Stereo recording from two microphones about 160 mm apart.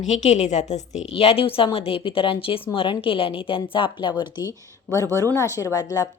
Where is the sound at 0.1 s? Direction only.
45° left (ahead or behind); by 4.5 s 30° left (ahead or behind).